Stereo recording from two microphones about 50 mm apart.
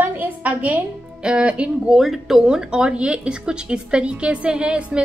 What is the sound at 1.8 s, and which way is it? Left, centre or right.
Speech, centre.